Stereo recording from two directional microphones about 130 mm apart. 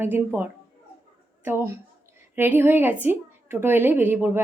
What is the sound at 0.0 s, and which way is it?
A woman's voice, 15° right (ahead or behind).